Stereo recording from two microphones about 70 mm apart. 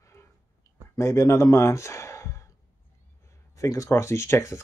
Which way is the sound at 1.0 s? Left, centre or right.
Left.